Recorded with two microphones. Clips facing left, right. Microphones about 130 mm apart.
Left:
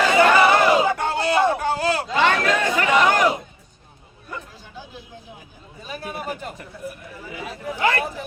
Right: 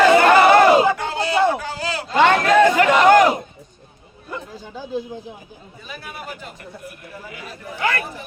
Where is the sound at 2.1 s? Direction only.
50° right (ahead or behind).